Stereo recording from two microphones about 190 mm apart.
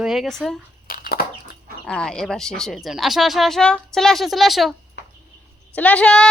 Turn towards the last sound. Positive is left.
turn(degrees=5)  # may be behind; listen again after turning